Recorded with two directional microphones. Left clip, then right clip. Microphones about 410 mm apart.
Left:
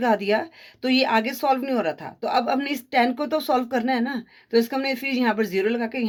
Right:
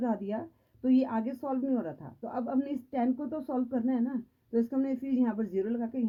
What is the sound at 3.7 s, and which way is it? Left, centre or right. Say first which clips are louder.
Speech: left 8 dB; centre.